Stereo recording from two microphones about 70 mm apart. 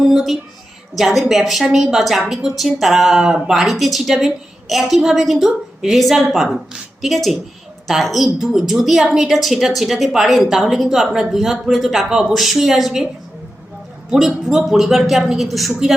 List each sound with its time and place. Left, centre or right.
0.0 s a sound: centre
0.9 s a woman's voice: centre
14.1 s a woman's voice: centre